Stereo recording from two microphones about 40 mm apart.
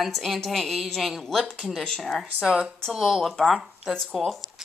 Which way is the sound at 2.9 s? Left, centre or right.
Centre.